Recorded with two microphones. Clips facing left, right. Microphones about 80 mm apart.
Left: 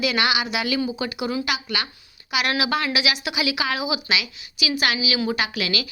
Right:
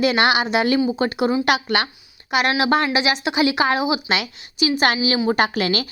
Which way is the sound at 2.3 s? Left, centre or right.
Right.